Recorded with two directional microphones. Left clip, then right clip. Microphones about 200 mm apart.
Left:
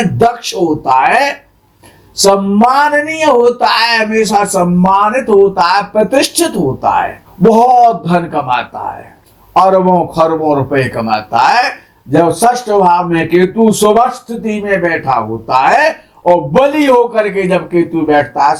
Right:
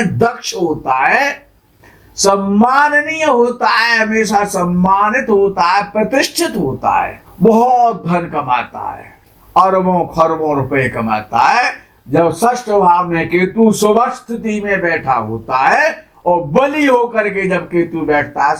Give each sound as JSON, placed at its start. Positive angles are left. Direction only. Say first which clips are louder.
{"t": 0.0, "sound": "speech", "louder": "left 4 dB", "side_deg": 30}